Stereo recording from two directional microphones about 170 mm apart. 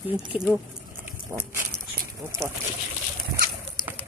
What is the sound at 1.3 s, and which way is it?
Speech, 15° right (ahead or behind).